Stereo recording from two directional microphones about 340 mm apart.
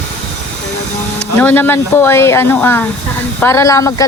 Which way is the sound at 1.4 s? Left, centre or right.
Centre.